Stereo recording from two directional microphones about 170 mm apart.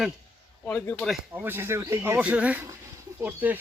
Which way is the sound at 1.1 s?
10° right (ahead or behind).